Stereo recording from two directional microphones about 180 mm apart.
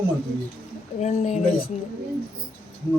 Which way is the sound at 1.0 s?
40° left (ahead or behind).